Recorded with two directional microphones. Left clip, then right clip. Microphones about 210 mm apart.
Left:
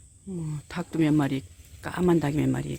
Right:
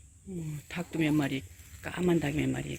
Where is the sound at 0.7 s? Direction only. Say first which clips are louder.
Left 5 dB; 30° left (ahead or behind).